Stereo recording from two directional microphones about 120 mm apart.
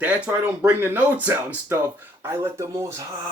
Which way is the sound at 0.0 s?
15° right (ahead or behind).